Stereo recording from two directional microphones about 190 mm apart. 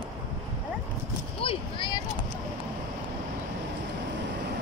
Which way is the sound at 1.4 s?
25° left (ahead or behind).